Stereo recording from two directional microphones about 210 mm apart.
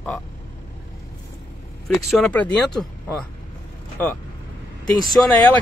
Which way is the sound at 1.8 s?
Centre (ahead or behind).